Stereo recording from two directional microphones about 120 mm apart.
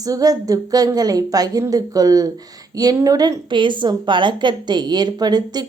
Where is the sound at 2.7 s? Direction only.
30° right (ahead or behind).